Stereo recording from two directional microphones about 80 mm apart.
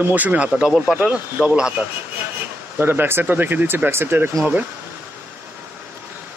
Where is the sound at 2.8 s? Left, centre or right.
Right.